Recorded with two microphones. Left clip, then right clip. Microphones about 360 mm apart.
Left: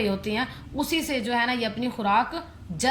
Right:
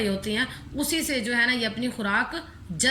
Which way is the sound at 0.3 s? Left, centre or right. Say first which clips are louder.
Right 1 dB; left.